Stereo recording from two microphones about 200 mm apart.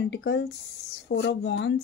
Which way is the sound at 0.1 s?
60° left (ahead or behind).